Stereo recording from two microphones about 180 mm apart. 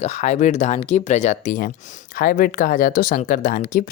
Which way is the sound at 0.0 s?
40° left (ahead or behind).